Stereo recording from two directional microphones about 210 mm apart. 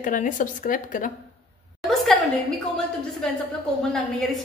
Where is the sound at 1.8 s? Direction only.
Centre (ahead or behind).